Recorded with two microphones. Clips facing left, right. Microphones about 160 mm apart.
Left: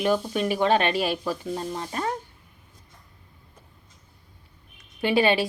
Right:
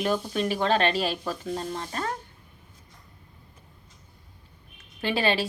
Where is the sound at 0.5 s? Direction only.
15° left (ahead or behind).